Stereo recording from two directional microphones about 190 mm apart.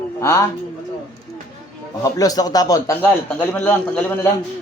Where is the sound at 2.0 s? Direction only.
20° left (ahead or behind).